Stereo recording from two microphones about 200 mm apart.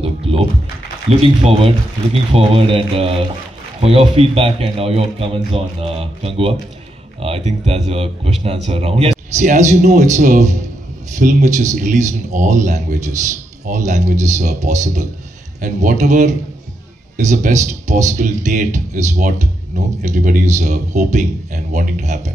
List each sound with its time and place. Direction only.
0.3 s typing: 30° right (ahead or behind)
1.2 s a man's voice: 30° right (ahead or behind)